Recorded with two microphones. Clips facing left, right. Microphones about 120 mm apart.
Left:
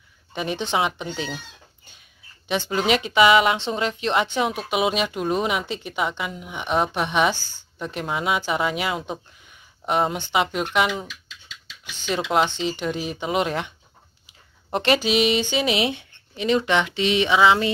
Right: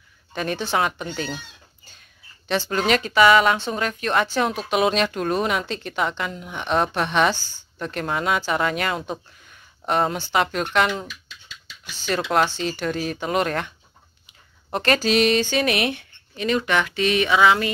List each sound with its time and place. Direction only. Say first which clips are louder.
0.3 s speech: right 1 dB; 15° left (ahead or behind)
2.4 s speech: even; 15° left (ahead or behind)
11.1 s a sound: right 1 dB; 90° left
11.9 s speech: even; 15° left (ahead or behind)
14.7 s speech: even; 20° left (ahead or behind)